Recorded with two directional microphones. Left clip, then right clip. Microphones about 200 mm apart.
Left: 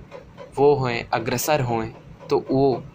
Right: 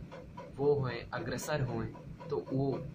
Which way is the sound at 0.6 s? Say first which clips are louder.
Left 13 dB; 30° left (ahead or behind).